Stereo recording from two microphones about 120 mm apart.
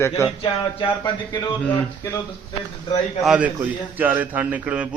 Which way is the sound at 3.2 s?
5° right (ahead or behind).